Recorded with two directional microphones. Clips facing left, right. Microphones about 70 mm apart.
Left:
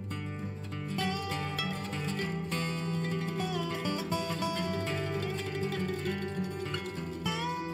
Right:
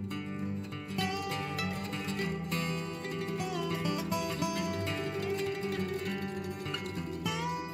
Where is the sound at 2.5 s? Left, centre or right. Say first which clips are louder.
Left 1 dB; left.